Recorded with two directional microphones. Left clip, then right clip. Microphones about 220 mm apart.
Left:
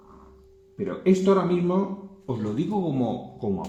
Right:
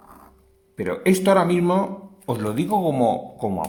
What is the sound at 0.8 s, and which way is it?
Speech, 50° right (ahead or behind).